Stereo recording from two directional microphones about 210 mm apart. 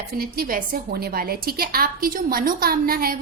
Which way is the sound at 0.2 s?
45° right (ahead or behind).